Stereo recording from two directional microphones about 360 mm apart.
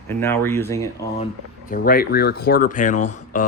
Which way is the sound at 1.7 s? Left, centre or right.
Left.